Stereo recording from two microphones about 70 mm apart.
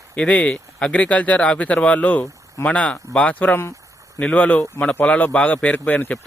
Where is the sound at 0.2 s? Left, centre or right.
Centre.